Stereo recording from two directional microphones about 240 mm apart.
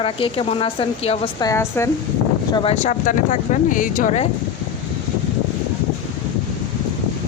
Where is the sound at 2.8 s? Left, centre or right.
Left.